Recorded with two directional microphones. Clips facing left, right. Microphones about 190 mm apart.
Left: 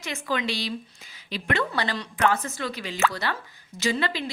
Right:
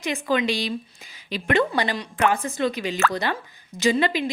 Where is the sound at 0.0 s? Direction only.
15° right (ahead or behind).